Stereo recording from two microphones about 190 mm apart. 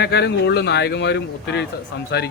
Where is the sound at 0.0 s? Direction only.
60° left (ahead or behind).